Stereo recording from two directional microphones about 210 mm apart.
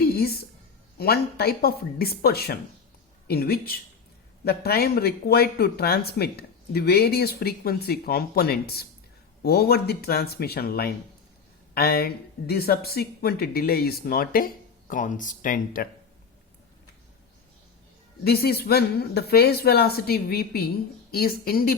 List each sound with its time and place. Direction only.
0.0 s a sound: 45° left (ahead or behind)
0.9 s speech: 50° left (ahead or behind)
18.2 s speech: 50° left (ahead or behind)